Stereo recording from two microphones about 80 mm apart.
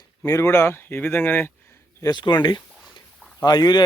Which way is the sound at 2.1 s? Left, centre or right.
Left.